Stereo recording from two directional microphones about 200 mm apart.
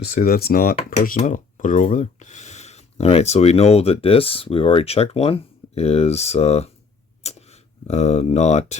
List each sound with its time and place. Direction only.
0.1 s speech: 50° left (ahead or behind); by 6.7 s 30° left (ahead or behind)
7.2 s sneeze: 30° left (ahead or behind)
7.9 s speech: 35° left (ahead or behind)